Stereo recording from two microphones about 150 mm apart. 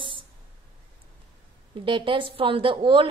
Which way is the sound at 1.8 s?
35° right (ahead or behind).